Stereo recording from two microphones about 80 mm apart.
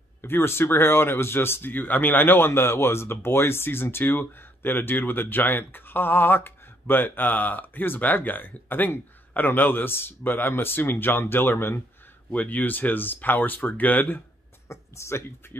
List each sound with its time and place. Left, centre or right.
0.2 s speech: left
14.7 s speech: left